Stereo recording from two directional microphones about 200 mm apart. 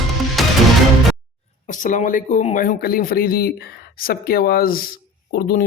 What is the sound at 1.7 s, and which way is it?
Speech, 40° left (ahead or behind).